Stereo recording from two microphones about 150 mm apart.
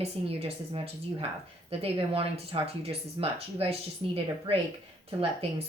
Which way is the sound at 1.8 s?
40° right (ahead or behind).